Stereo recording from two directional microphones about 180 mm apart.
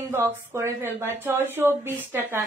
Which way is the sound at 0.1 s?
15° right (ahead or behind).